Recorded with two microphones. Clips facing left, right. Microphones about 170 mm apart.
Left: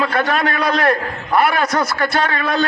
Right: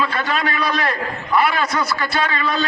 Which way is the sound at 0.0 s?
55° left (ahead or behind).